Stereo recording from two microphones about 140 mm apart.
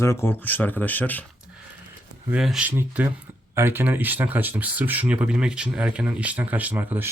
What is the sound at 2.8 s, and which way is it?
Speech, 15° right (ahead or behind).